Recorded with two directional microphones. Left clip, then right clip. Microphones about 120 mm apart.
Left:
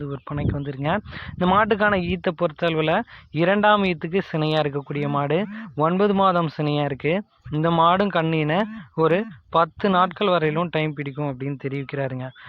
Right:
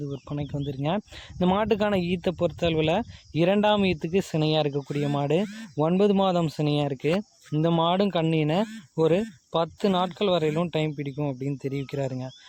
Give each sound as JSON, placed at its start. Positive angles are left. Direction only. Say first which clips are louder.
{"t": 0.6, "sound": "speech", "louder": "left 3 dB", "side_deg": -25}